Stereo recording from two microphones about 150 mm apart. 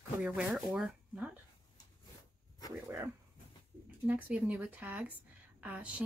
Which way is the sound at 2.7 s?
15° right (ahead or behind).